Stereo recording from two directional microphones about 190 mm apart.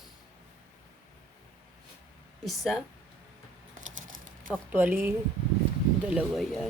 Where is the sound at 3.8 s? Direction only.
45° right (ahead or behind).